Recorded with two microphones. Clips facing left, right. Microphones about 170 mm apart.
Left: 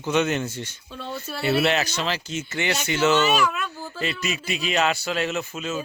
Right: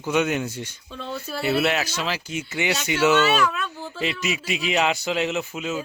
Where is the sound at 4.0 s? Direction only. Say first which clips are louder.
Right 2 dB; 15° right (ahead or behind).